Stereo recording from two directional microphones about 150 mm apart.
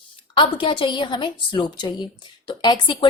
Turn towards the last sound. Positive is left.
turn(degrees=30)  # may be behind; listen again after turning